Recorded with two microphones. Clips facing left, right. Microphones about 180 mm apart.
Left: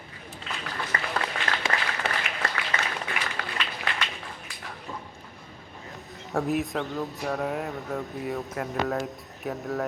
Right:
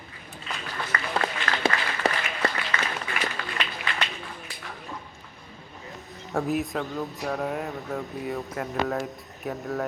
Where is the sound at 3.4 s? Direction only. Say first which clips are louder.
Even; 55° left (ahead or behind).